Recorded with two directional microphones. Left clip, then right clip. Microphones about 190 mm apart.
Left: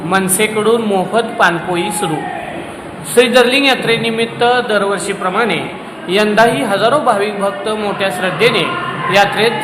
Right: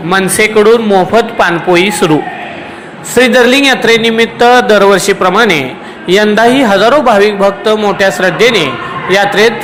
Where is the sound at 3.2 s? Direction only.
25° right (ahead or behind).